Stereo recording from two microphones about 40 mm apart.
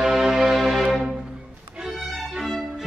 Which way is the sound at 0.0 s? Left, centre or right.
Centre.